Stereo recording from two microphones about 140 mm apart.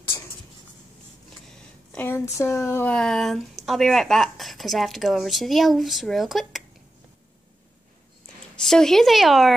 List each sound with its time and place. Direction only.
0.1 s a sound: 25° left (ahead or behind)
1.9 s speech: 15° left (ahead or behind)
8.5 s speech: 5° left (ahead or behind)